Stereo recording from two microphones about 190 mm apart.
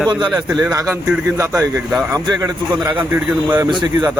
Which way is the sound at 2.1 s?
20° right (ahead or behind).